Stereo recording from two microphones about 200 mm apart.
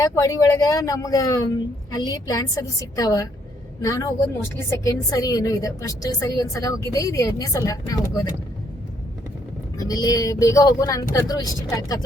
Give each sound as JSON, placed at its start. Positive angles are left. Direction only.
{"t": 0.0, "sound": "a woman's voice", "side_deg": 15}
{"t": 9.7, "sound": "a woman's voice", "side_deg": 20}